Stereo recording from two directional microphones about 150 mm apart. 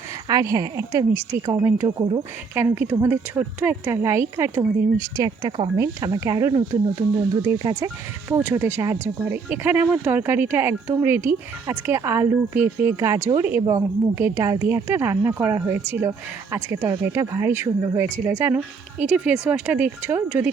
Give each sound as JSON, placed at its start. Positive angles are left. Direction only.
{"t": 0.3, "sound": "a woman's voice", "side_deg": -25}
{"t": 7.6, "sound": "a woman's voice", "side_deg": -20}